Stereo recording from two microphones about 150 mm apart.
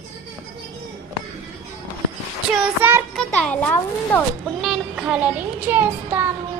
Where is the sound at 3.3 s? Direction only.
10° left (ahead or behind).